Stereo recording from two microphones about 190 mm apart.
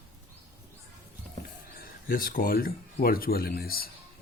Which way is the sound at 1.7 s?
50° left (ahead or behind).